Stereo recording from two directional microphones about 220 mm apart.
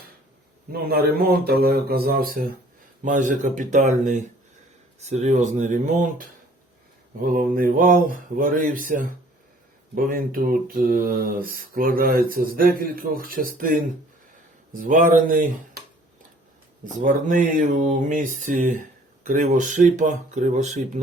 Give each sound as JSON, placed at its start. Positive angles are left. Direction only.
{"t": 0.7, "sound": "speech", "side_deg": -45}
{"t": 5.0, "sound": "speech", "side_deg": -30}
{"t": 7.3, "sound": "speech", "side_deg": -40}
{"t": 16.8, "sound": "speech", "side_deg": -35}